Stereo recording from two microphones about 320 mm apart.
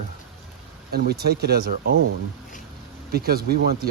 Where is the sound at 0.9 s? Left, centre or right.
Right.